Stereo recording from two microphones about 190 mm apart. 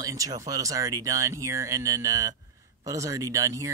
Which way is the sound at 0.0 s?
20° right (ahead or behind).